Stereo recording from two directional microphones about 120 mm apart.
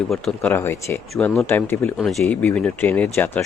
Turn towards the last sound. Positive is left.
turn(degrees=15)  # may be behind; listen again after turning